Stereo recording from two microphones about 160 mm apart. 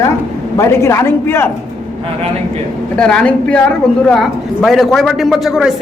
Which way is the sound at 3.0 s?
5° left (ahead or behind).